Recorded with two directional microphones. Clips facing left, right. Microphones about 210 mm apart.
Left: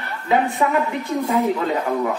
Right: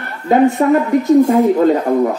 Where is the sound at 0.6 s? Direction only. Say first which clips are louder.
Right 8 dB; 45° right (ahead or behind).